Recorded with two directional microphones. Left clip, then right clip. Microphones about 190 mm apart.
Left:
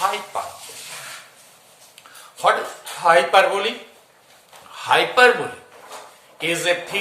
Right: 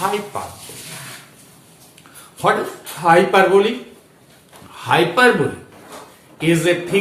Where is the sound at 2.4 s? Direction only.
15° left (ahead or behind).